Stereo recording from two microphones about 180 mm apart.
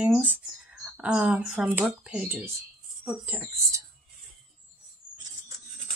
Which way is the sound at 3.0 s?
10° right (ahead or behind).